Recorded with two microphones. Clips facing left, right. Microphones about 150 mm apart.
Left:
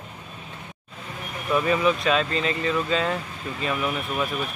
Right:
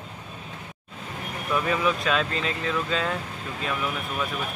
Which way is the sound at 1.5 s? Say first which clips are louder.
Left 3 dB; centre (ahead or behind).